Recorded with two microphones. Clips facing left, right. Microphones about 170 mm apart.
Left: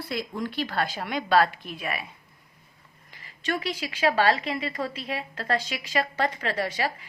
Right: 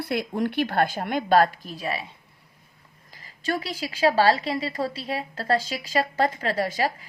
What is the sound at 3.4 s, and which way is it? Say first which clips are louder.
A woman's voice: right 1 dB; 40° right (ahead or behind).